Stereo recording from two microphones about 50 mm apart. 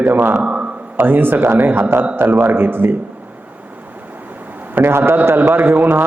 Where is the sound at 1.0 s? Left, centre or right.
Right.